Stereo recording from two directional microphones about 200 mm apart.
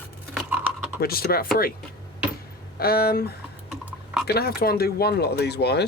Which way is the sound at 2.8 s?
50° left (ahead or behind).